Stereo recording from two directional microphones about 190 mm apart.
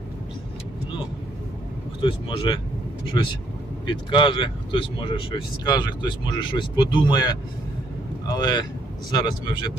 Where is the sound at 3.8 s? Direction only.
25° left (ahead or behind).